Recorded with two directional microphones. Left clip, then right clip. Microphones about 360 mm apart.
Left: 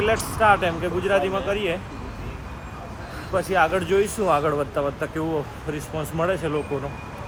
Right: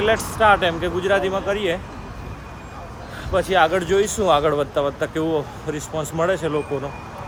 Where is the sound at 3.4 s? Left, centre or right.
Centre.